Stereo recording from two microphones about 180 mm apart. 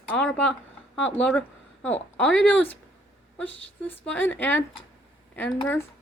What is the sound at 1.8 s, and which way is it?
Speech, 10° left (ahead or behind).